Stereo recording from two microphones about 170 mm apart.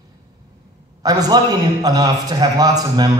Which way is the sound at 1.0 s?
20° right (ahead or behind).